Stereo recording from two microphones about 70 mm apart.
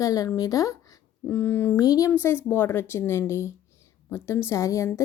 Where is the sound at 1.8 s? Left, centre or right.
Left.